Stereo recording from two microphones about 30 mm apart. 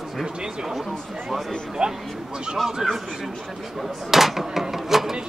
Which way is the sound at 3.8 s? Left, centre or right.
Centre.